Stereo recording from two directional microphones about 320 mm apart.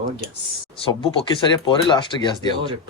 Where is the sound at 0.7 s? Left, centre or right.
Centre.